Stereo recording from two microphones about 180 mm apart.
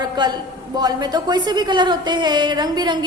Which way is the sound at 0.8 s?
20° right (ahead or behind).